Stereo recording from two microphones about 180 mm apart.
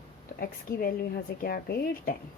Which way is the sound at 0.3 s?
55° left (ahead or behind).